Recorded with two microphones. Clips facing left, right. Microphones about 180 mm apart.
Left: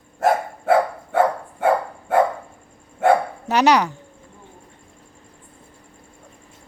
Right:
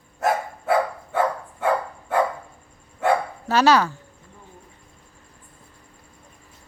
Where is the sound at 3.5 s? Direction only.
20° left (ahead or behind).